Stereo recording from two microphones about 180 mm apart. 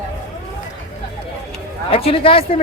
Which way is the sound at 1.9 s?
30° left (ahead or behind).